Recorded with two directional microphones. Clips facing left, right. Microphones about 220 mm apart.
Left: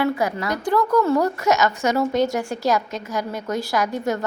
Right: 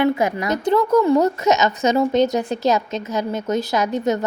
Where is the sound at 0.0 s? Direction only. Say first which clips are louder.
Right 3 dB; 20° right (ahead or behind).